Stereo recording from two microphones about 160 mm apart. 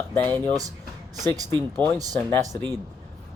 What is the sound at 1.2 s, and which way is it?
Speech, 20° right (ahead or behind).